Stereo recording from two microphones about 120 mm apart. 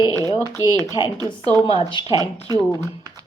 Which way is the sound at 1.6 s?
50° left (ahead or behind).